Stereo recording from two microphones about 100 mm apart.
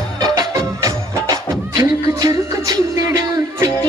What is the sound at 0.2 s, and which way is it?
Music, 35° right (ahead or behind).